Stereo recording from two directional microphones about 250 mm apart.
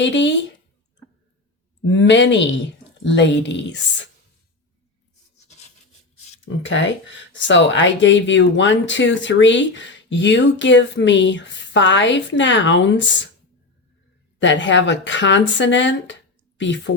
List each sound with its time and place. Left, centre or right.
0.0 s speech: left
1.8 s speech: left
6.4 s speech: left
14.3 s speech: left